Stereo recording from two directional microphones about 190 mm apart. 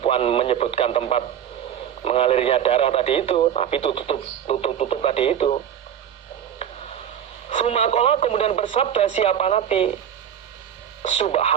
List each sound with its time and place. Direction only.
0.0 s speech: 30° left (ahead or behind)
7.5 s speech: 30° left (ahead or behind)
11.0 s speech: 35° left (ahead or behind)